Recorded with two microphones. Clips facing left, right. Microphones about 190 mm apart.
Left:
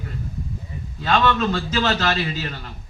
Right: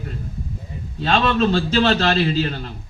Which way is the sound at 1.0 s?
30° right (ahead or behind).